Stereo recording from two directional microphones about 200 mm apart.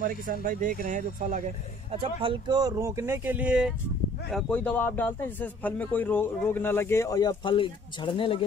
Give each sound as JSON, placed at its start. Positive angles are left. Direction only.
{"t": 0.0, "sound": "speech", "side_deg": -45}
{"t": 1.9, "sound": "speech", "side_deg": -25}